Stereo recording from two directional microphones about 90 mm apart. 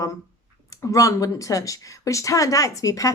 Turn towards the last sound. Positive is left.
turn(degrees=40)  # may be behind; listen again after turning